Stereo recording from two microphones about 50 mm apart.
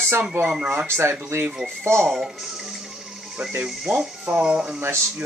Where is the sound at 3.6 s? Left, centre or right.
Centre.